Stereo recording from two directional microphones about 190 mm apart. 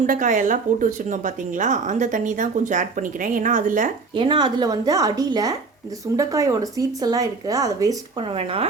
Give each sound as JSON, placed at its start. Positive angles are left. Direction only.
{"t": 0.0, "sound": "speech", "side_deg": -45}
{"t": 4.1, "sound": "a woman's voice", "side_deg": -25}